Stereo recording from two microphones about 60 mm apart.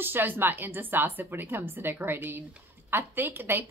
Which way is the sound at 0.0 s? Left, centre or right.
Right.